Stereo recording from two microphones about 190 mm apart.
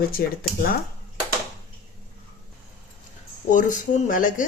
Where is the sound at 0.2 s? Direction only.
50° left (ahead or behind).